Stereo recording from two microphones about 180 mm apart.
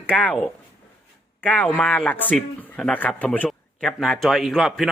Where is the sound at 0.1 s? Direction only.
5° left (ahead or behind).